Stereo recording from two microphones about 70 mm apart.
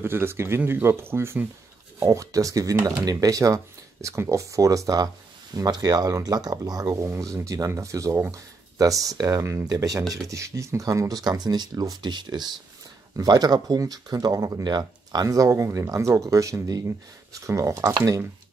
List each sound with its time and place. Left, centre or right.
0.0 s speech: right
2.0 s speech: right
3.1 s speech: right
7.1 s speech: right
9.4 s speech: right
9.7 s speech: right
13.1 s speech: right
14.6 s speech: right
15.2 s speech: right